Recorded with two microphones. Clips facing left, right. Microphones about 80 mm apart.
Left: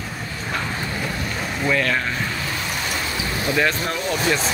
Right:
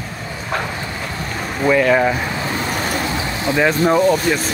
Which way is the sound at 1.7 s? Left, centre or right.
Centre.